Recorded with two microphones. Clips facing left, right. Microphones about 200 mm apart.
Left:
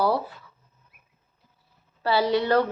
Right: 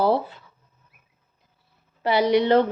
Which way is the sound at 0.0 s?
25° right (ahead or behind).